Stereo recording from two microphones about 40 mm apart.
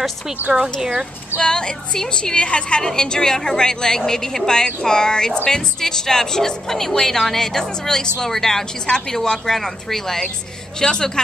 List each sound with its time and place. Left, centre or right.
0.5 s speech: centre
1.4 s a woman's voice: centre
2.8 s speech: centre